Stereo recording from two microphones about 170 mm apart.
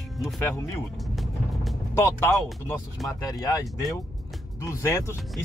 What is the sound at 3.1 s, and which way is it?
A man's voice, 20° left (ahead or behind).